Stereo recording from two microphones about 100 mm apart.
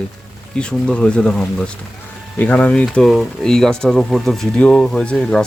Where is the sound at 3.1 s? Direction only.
5° left (ahead or behind).